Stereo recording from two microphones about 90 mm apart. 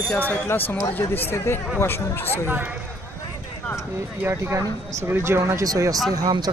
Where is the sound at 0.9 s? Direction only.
25° left (ahead or behind).